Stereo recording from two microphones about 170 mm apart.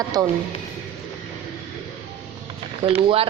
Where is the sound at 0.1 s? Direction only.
20° right (ahead or behind).